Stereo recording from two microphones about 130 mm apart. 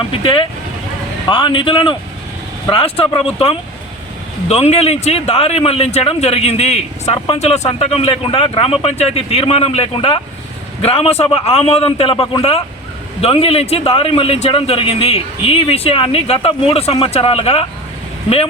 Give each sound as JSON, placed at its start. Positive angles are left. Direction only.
{"t": 0.1, "sound": "a man's voice", "side_deg": 45}